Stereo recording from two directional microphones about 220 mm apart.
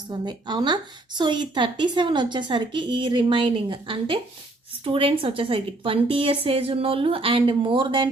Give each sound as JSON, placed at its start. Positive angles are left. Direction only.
{"t": 0.1, "sound": "a woman's voice", "side_deg": -20}